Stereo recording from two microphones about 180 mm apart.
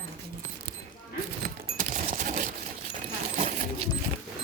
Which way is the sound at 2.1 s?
45° right (ahead or behind).